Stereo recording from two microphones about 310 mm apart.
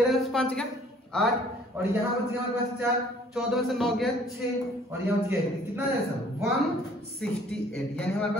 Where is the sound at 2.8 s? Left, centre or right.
Centre.